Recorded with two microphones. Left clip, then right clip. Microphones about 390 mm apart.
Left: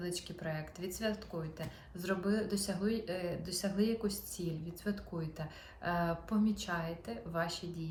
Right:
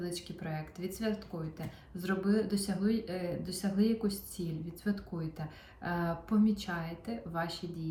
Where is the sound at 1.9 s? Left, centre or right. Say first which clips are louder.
Right 3 dB; left.